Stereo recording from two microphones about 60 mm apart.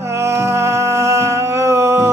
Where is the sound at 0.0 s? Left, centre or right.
Right.